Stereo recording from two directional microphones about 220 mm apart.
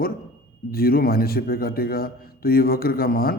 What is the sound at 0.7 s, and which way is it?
A man's voice, 40° left (ahead or behind).